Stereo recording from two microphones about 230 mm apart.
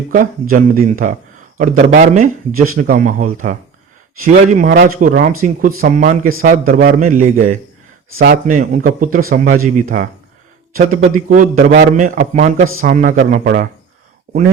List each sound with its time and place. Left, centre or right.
0.1 s a man's voice: right
10.8 s a man's voice: right